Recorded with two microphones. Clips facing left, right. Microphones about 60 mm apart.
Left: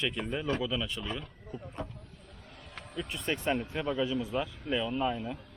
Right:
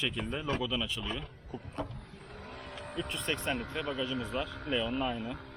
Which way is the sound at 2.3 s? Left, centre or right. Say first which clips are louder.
Right 9 dB; right.